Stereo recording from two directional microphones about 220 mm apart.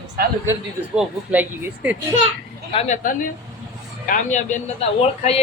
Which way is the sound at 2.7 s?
30° left (ahead or behind).